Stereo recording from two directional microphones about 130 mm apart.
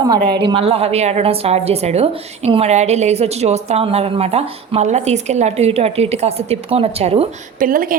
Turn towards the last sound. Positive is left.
turn(degrees=-90)